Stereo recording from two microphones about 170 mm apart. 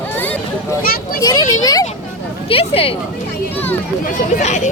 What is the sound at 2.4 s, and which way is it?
Speech, 35° left (ahead or behind).